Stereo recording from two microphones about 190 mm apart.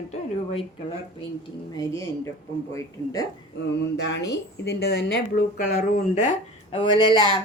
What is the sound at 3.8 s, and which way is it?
A woman's voice, 65° left (ahead or behind).